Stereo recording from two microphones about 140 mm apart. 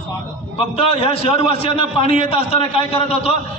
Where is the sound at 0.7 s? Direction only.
45° left (ahead or behind).